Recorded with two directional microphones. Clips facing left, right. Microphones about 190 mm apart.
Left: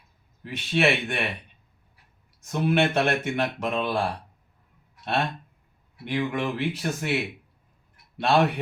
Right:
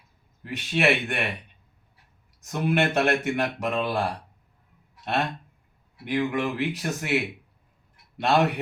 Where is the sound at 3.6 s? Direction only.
Centre (ahead or behind).